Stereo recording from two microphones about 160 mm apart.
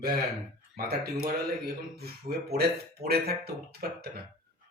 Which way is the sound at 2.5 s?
80° right.